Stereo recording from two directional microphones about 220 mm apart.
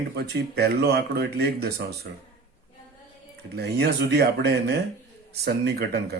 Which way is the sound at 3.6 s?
50° right (ahead or behind).